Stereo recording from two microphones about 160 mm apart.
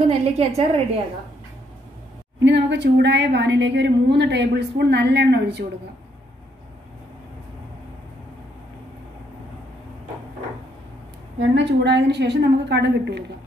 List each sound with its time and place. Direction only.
0.0 s a woman's voice: 45° right (ahead or behind)
2.4 s a woman's voice: 90° right
11.3 s a woman's voice: 90° right